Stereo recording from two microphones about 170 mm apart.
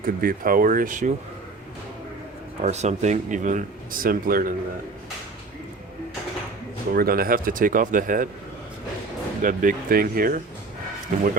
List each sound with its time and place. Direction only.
0.0 s speech: 55° right (ahead or behind)
2.6 s a man's voice: 40° right (ahead or behind); by 4.5 s 60° right (ahead or behind)
6.9 s speech: 60° right (ahead or behind)
9.4 s a man's voice: 50° right (ahead or behind)